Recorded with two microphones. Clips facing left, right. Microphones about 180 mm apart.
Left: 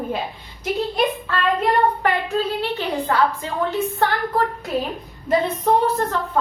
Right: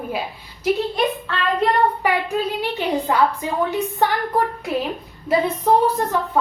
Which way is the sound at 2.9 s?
15° right (ahead or behind).